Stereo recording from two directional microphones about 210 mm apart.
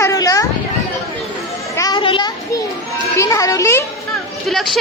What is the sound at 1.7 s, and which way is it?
Children playing, 20° left (ahead or behind).